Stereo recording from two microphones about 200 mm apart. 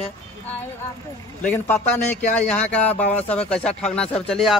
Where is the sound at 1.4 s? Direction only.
10° left (ahead or behind).